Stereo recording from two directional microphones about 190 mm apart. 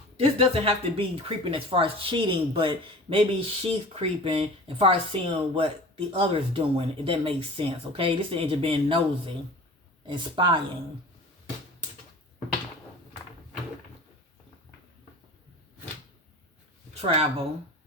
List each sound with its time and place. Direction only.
0.2 s speech: 30° right (ahead or behind)
16.9 s speech: 30° right (ahead or behind)